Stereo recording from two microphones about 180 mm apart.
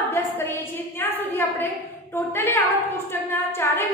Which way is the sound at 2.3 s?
15° left (ahead or behind).